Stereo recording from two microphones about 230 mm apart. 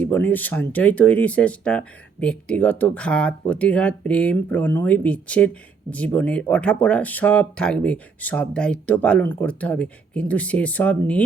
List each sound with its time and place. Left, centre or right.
0.0 s speech: centre